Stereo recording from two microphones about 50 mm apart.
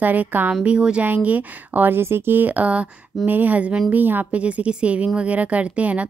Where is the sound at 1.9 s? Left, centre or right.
Right.